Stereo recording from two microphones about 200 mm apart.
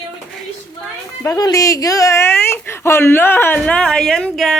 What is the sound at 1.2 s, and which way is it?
Speech, 15° left (ahead or behind).